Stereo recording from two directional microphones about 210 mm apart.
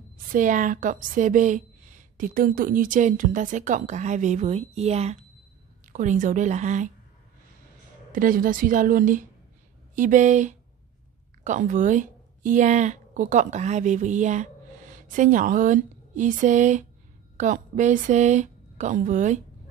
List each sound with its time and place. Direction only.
0.3 s a woman's voice: 40° right (ahead or behind)
8.1 s a woman's voice: 40° right (ahead or behind)